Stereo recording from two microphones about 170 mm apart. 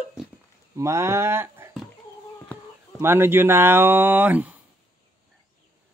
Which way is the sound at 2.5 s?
10° left (ahead or behind).